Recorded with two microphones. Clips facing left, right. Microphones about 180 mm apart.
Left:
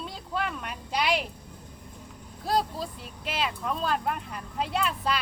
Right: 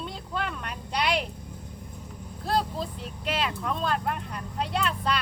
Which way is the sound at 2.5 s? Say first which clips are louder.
Even; 5° left (ahead or behind).